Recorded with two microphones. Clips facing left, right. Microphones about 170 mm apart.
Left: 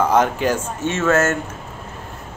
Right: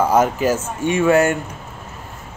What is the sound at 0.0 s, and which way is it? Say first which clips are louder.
Speech: right 1 dB; 10° right (ahead or behind).